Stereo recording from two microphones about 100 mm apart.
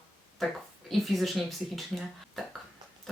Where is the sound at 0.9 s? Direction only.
Centre (ahead or behind).